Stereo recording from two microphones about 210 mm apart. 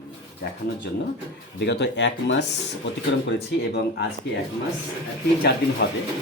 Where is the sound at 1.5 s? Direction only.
55° left (ahead or behind).